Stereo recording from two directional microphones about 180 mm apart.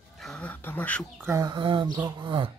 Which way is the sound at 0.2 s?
5° left (ahead or behind).